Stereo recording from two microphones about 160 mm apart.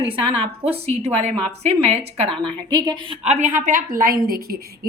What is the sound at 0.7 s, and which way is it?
A woman's voice, 40° right (ahead or behind).